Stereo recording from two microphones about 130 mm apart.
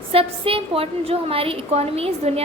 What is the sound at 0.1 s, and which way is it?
A woman's voice, 45° right (ahead or behind).